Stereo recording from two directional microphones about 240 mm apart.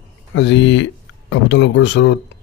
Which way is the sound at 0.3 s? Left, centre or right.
Left.